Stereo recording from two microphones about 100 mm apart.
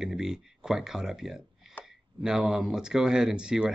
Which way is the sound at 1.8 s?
20° left (ahead or behind).